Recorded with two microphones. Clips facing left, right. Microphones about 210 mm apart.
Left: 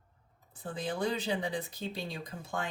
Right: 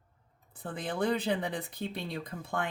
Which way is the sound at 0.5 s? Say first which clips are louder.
Even; 60° right (ahead or behind).